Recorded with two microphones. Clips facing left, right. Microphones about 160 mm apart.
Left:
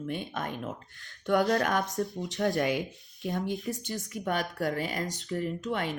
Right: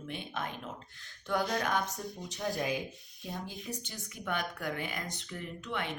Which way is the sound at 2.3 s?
75° left (ahead or behind).